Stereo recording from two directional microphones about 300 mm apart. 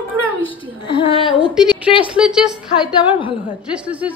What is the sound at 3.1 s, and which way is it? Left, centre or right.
Speech, centre.